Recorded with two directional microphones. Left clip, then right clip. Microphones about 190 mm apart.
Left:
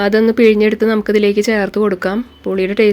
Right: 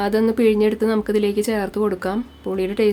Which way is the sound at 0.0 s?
15° left (ahead or behind).